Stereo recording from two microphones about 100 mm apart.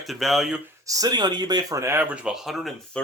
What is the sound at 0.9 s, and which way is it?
Speech, 40° right (ahead or behind).